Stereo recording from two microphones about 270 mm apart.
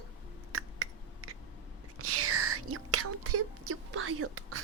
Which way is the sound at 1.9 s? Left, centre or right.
Right.